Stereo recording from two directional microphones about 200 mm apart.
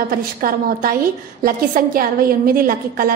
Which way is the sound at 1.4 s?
45° right (ahead or behind).